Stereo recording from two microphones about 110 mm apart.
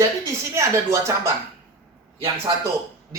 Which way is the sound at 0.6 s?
25° right (ahead or behind).